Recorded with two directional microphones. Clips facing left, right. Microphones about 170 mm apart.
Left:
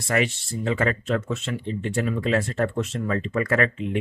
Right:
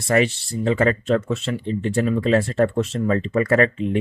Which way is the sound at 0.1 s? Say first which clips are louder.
Right 5 dB; 35° right (ahead or behind).